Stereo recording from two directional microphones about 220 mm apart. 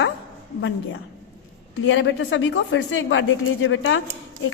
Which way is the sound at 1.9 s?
60° left (ahead or behind).